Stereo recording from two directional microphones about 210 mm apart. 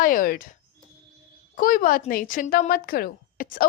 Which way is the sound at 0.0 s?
40° left (ahead or behind).